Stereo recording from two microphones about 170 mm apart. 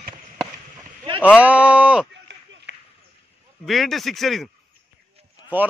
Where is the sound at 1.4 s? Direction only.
5° right (ahead or behind).